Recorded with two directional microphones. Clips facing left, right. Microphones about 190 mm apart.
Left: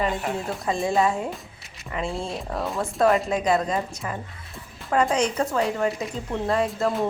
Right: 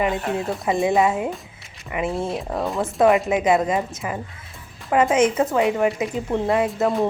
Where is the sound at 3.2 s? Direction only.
15° right (ahead or behind).